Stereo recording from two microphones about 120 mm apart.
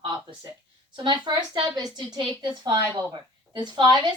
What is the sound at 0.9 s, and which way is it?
A woman's voice, 40° right (ahead or behind).